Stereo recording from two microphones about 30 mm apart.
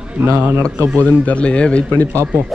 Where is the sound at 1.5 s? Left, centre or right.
Left.